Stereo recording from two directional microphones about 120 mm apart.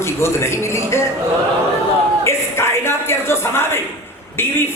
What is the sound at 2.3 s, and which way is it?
A woman's voice, 20° left (ahead or behind).